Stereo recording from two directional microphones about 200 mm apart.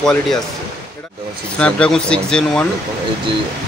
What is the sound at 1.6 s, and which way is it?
A man's voice, 5° left (ahead or behind).